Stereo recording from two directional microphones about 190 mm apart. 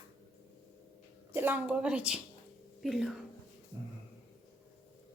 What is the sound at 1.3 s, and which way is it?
A woman's voice, 10° right (ahead or behind).